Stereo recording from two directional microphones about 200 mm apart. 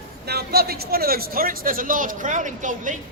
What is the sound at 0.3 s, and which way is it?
A man's voice, 50° right (ahead or behind).